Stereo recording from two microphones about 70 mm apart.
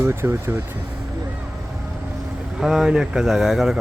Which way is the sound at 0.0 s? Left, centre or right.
Right.